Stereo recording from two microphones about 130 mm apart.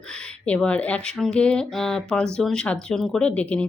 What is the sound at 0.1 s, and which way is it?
Speech, 10° left (ahead or behind).